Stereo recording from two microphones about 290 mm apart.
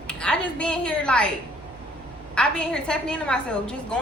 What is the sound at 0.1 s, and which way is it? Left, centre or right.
A woman's voice, centre.